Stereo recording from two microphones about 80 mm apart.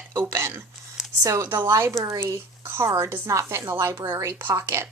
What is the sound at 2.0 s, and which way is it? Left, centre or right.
A woman's voice, right.